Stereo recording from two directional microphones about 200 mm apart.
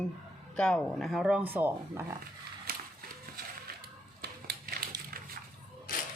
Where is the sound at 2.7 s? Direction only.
50° right (ahead or behind).